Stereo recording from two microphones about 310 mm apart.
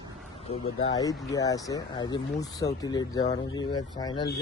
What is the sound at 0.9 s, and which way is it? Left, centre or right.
Speech, centre.